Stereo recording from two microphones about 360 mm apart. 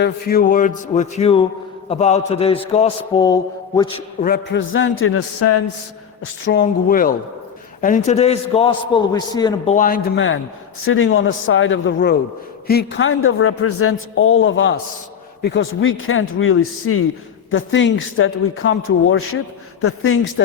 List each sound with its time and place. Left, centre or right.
0.0 s a man's voice: left
4.2 s a man's voice: left
6.4 s a man's voice: left